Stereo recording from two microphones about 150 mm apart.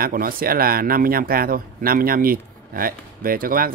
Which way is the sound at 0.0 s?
75° right (ahead or behind).